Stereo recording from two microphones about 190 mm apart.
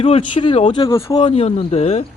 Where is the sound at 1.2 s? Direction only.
30° left (ahead or behind).